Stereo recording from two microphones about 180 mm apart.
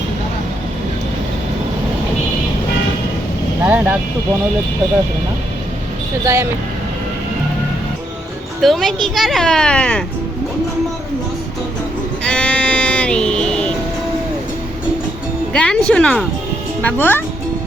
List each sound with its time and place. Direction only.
3.6 s vehicle: 10° right (ahead or behind)
6.2 s speech: 15° right (ahead or behind)
8.6 s speech: centre (ahead or behind)
12.2 s music: 5° left (ahead or behind)
15.5 s a child's voice: 5° left (ahead or behind)